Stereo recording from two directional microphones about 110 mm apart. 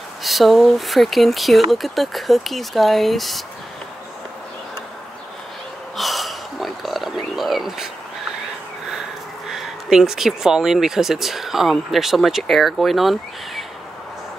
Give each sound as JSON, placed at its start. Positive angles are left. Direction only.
{"t": 0.2, "sound": "speech", "side_deg": 0}
{"t": 5.9, "sound": "a sound", "side_deg": 0}
{"t": 9.5, "sound": "speech", "side_deg": -5}